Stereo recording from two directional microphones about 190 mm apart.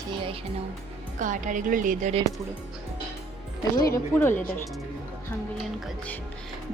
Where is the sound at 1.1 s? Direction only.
40° right (ahead or behind).